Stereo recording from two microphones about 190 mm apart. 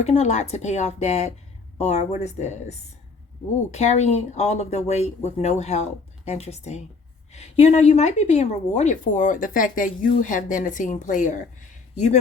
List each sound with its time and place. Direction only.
0.0 s a woman's voice: 35° left (ahead or behind)